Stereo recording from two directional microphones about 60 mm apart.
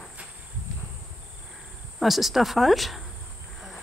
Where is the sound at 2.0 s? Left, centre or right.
Centre.